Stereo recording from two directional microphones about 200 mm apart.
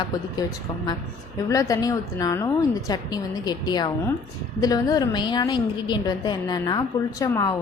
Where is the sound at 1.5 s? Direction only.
15° left (ahead or behind).